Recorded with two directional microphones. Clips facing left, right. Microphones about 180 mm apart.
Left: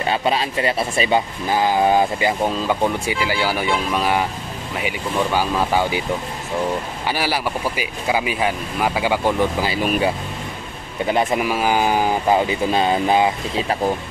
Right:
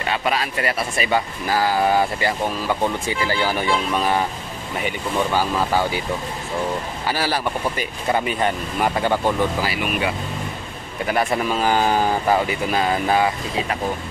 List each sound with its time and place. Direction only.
0.0 s speech: 25° left (ahead or behind)
7.1 s speech: 15° left (ahead or behind)
9.8 s speech: 35° left (ahead or behind)
11.1 s speech: 20° left (ahead or behind)
11.4 s speech: 10° left (ahead or behind)